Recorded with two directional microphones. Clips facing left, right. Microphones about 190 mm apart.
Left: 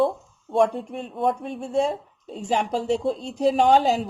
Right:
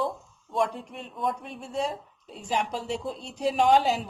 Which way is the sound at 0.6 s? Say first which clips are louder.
Left 7 dB; 35° left (ahead or behind).